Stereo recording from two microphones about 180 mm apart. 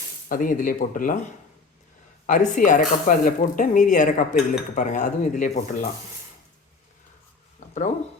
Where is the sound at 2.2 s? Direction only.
45° left (ahead or behind).